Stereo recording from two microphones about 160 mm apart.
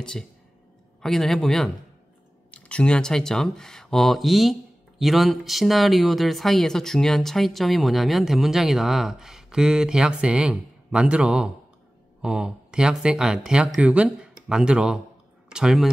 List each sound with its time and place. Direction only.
0.0 s speech: 5° left (ahead or behind)